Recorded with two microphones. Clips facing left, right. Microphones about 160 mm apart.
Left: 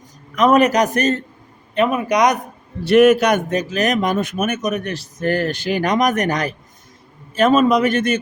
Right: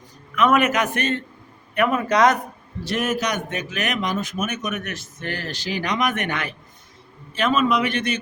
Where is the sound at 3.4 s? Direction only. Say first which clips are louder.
Left 8 dB; 35° left (ahead or behind); by 4.5 s 60° left (ahead or behind).